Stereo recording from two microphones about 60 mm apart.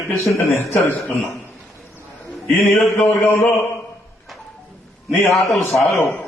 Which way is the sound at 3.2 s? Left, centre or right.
Left.